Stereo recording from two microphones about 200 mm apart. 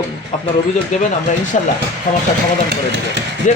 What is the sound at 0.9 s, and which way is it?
Speech, 40° left (ahead or behind).